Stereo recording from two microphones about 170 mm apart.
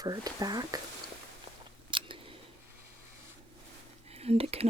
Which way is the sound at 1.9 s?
30° right (ahead or behind).